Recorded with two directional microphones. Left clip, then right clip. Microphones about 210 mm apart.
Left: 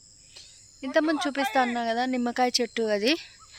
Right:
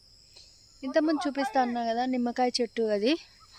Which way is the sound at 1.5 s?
5° left (ahead or behind).